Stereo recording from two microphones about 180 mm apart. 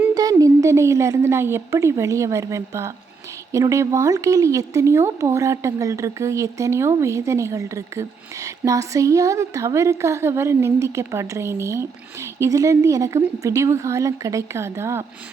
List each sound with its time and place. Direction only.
0.0 s a woman's voice: 20° right (ahead or behind)